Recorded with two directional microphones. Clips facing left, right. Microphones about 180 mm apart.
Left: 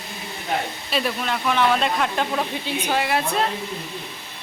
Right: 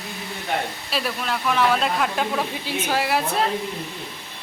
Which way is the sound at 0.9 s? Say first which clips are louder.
Left 3 dB; centre (ahead or behind).